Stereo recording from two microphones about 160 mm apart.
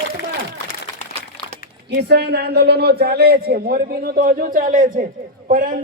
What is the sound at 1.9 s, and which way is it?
A man's voice, 90° right.